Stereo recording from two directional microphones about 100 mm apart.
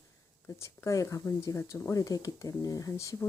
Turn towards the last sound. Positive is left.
turn(degrees=30)  # may be behind; listen again after turning